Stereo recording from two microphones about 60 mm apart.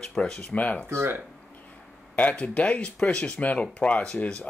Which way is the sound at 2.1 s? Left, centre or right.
Left.